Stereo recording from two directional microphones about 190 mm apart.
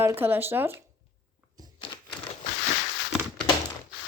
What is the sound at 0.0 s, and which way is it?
Speech, 10° right (ahead or behind).